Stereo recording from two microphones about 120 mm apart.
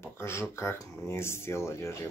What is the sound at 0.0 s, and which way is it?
Speech, 20° left (ahead or behind).